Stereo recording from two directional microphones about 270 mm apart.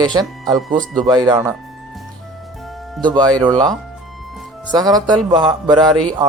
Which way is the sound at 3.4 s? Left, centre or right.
Centre.